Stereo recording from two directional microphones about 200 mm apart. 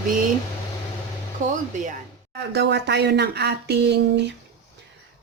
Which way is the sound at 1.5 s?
40° right (ahead or behind).